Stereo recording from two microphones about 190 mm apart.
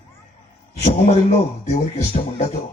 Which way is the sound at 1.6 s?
35° left (ahead or behind).